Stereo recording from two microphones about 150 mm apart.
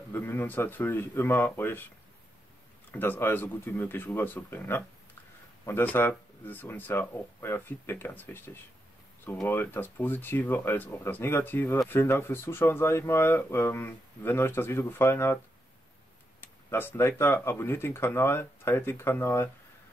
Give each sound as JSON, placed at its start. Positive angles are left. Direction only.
{"t": 0.1, "sound": "speech", "side_deg": 10}
{"t": 2.9, "sound": "speech", "side_deg": 15}